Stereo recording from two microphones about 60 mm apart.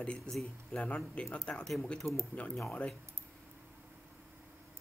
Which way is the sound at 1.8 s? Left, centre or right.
Centre.